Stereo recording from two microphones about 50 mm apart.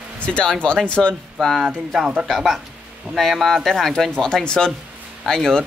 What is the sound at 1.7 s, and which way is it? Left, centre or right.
Speech, centre.